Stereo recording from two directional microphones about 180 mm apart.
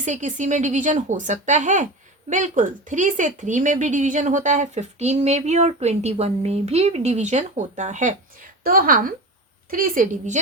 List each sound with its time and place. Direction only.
0.0 s speech: 45° right (ahead or behind)